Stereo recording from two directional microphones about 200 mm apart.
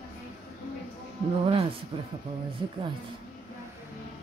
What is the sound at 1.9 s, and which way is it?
Speech, 20° right (ahead or behind).